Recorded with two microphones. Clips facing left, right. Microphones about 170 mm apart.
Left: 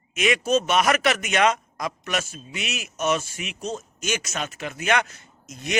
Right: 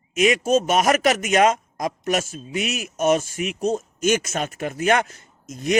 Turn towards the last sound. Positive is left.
turn(degrees=-45)  # may be behind; listen again after turning